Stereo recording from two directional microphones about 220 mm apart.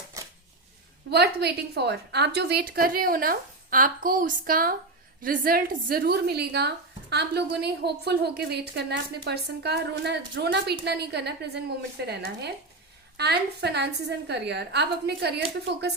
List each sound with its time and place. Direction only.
1.1 s a woman's voice: 50° right (ahead or behind)